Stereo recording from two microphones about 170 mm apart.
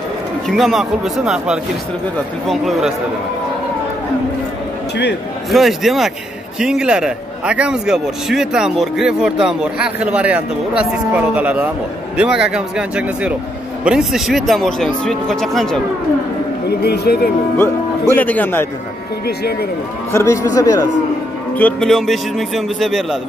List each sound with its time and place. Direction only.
0.5 s a man's voice: centre (ahead or behind)
5.5 s a man's voice: centre (ahead or behind)
16.8 s speech: 70° left (ahead or behind)
17.6 s speech: 10° left (ahead or behind)
20.1 s speech: 15° left (ahead or behind)
21.5 s a man's voice: 5° left (ahead or behind)